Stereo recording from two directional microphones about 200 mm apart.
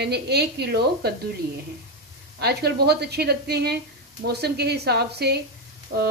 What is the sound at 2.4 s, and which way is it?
A woman's voice, 55° right (ahead or behind).